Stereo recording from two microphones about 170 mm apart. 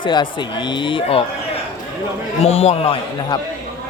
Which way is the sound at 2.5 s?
35° left (ahead or behind).